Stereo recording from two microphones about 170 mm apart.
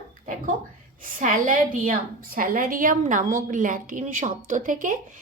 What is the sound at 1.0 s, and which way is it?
A woman's voice, 50° right (ahead or behind).